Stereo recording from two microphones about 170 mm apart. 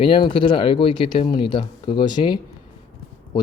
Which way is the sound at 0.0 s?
30° left (ahead or behind).